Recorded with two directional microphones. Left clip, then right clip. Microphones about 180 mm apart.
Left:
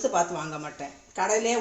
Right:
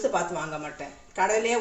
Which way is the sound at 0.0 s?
30° left (ahead or behind).